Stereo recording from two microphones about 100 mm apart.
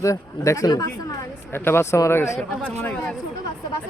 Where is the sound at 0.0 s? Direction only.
30° left (ahead or behind).